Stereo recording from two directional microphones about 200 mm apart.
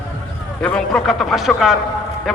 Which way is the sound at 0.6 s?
5° left (ahead or behind).